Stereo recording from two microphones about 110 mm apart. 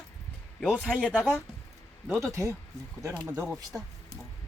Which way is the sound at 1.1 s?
15° right (ahead or behind).